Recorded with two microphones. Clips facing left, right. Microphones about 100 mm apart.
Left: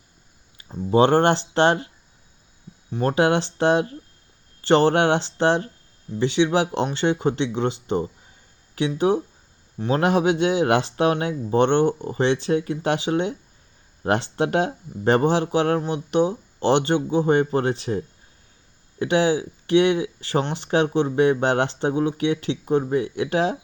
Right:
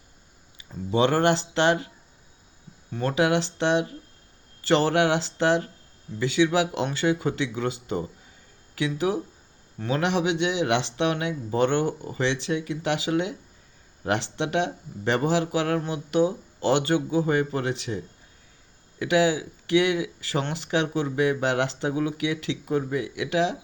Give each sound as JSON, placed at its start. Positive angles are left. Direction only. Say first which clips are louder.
{"t": 0.7, "sound": "speech", "louder": "left 5 dB", "side_deg": 35}
{"t": 3.0, "sound": "speech", "louder": "left 3 dB", "side_deg": 35}